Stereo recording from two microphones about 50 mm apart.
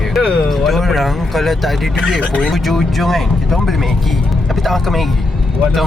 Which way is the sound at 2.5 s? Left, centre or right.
Centre.